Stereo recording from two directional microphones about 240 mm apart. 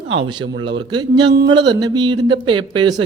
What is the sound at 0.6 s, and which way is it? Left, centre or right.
Speech, centre.